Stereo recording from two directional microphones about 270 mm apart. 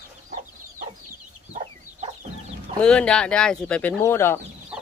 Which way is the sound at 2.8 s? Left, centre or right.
Centre.